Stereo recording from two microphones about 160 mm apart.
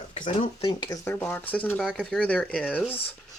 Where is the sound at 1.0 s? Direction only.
10° left (ahead or behind).